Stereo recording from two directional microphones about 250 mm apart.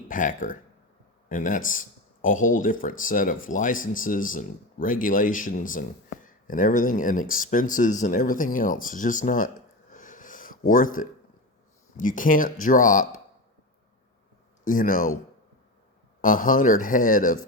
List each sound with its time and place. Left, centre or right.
0.1 s speech: left
9.9 s a sound: left
10.7 s speech: left
14.6 s speech: left
16.2 s speech: left